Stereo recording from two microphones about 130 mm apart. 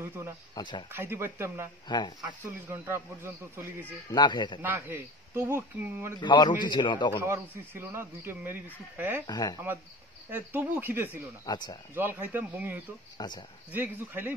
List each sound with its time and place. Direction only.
0.6 s a man's voice: 35° left (ahead or behind)
0.9 s speech: 20° right (ahead or behind)
1.9 s a man's voice: 35° left (ahead or behind)
2.2 s speech: 20° right (ahead or behind)
4.1 s a man's voice: 35° left (ahead or behind)
4.6 s speech: 15° right (ahead or behind)
6.2 s a man's voice: 35° left (ahead or behind)
7.2 s speech: 20° right (ahead or behind)
9.2 s a man's voice: 30° left (ahead or behind)
10.3 s speech: 15° right (ahead or behind)
11.4 s a man's voice: 30° left (ahead or behind)
11.9 s speech: 15° right (ahead or behind)
13.2 s a man's voice: 35° left (ahead or behind)
13.7 s speech: 15° right (ahead or behind)